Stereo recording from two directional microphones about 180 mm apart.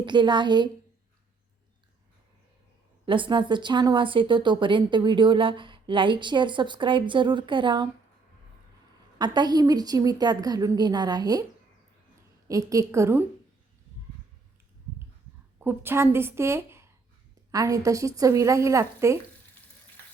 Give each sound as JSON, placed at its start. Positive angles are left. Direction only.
{"t": 0.0, "sound": "speech", "side_deg": -25}
{"t": 3.1, "sound": "speech", "side_deg": -25}
{"t": 9.1, "sound": "speech", "side_deg": -25}
{"t": 12.5, "sound": "a woman's voice", "side_deg": -20}
{"t": 15.6, "sound": "a woman's voice", "side_deg": -10}